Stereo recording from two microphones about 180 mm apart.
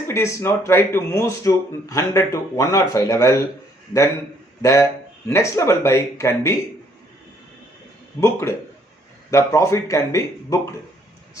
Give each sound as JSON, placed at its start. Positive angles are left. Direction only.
{"t": 0.1, "sound": "speech", "side_deg": 15}
{"t": 4.6, "sound": "speech", "side_deg": 15}
{"t": 8.2, "sound": "speech", "side_deg": 15}